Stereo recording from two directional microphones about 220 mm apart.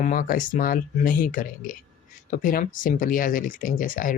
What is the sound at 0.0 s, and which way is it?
Speech, 40° left (ahead or behind).